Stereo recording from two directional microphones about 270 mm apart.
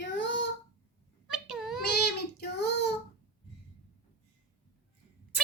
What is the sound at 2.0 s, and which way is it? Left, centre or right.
Child singing, left.